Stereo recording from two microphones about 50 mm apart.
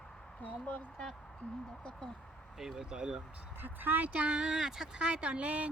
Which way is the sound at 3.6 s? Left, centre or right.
Right.